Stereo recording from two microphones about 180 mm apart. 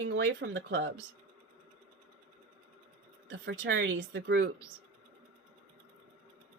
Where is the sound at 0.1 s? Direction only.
90° right.